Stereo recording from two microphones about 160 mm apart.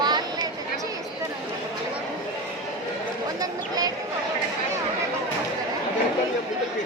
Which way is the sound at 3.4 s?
25° right (ahead or behind).